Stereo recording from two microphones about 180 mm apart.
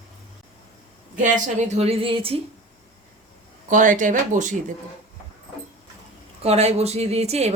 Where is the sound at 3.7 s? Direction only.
45° right (ahead or behind).